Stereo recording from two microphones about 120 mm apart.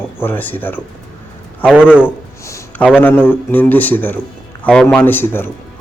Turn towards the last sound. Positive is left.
turn(degrees=15)  # may be behind; listen again after turning